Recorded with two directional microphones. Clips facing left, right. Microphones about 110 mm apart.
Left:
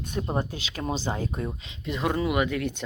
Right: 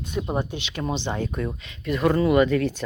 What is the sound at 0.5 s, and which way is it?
Speech, 35° left (ahead or behind).